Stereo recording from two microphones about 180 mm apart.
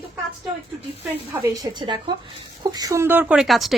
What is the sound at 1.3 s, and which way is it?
A woman's voice, 15° right (ahead or behind).